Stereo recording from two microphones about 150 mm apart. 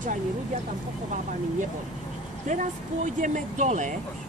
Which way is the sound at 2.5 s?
55° right (ahead or behind).